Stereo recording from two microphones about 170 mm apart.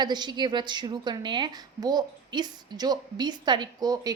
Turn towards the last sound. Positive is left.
turn(degrees=-20)  # may be behind; listen again after turning